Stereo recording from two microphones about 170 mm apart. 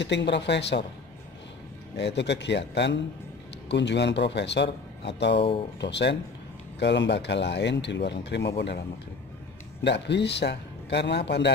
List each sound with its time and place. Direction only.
0.0 s speech: 90° left
2.0 s speech: 90° left
9.8 s speech: 90° left